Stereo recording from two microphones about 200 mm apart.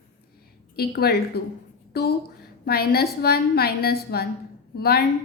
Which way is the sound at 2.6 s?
50° left (ahead or behind).